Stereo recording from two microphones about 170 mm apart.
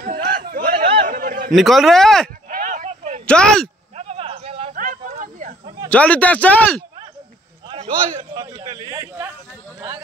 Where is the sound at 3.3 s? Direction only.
5° left (ahead or behind).